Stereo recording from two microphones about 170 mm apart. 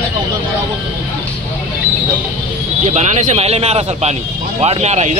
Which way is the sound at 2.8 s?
45° right (ahead or behind).